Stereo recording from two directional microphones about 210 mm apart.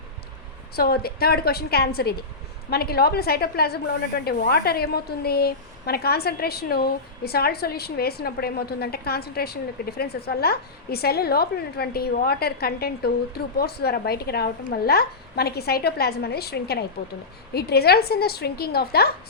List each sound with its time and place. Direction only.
0.8 s a woman's voice: 50° left (ahead or behind)